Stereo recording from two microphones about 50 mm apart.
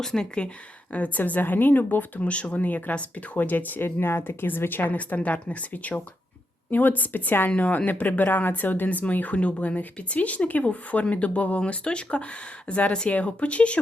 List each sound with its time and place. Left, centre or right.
0.0 s speech: centre
0.9 s speech: left
2.2 s speech: left
4.9 s speech: left